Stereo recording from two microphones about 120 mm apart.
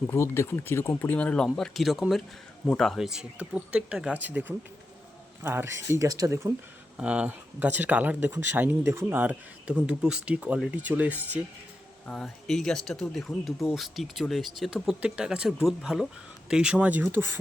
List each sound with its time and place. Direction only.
0.1 s speech: 20° left (ahead or behind); by 6.5 s 25° right (ahead or behind)
6.9 s speech: 10° right (ahead or behind)
12.0 s speech: 5° left (ahead or behind); by 17.4 s 20° right (ahead or behind)